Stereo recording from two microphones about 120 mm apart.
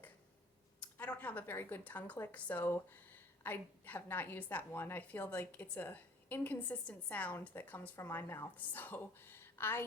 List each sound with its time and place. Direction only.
0.8 s a woman's voice: 10° left (ahead or behind)